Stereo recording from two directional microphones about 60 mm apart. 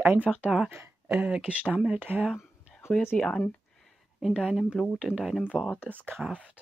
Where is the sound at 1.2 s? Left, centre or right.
Centre.